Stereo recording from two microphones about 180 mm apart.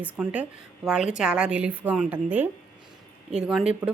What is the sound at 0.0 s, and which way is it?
A woman's voice, 5° right (ahead or behind).